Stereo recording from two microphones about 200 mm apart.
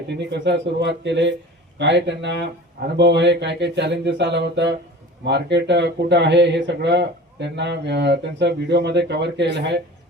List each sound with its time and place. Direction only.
0.1 s speech: 60° right (ahead or behind)